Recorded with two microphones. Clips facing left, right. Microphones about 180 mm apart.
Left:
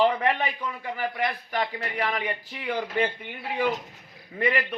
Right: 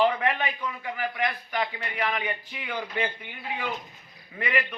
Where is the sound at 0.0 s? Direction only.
40° left (ahead or behind).